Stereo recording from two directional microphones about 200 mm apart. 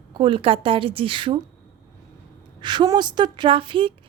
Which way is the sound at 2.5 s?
20° right (ahead or behind).